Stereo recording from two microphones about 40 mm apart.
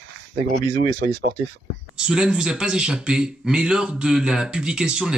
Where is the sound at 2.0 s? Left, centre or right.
Right.